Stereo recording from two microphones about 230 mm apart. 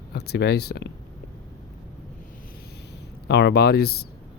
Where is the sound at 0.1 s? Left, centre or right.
Left.